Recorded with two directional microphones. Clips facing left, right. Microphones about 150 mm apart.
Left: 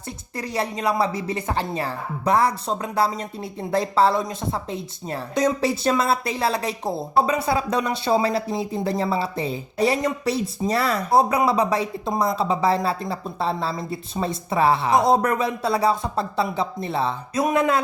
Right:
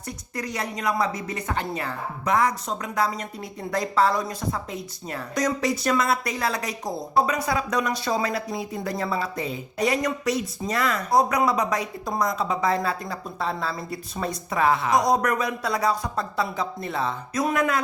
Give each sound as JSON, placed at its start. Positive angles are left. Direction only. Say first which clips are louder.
{"t": 0.3, "sound": "a woman's voice", "louder": "left 4 dB", "side_deg": 30}